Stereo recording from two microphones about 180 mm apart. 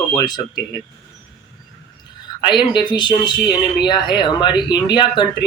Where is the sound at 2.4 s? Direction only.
25° left (ahead or behind).